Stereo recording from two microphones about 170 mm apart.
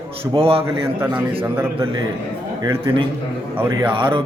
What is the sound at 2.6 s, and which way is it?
Speech, 20° right (ahead or behind).